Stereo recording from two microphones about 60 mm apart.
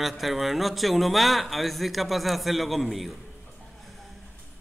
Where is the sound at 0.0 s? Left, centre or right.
Centre.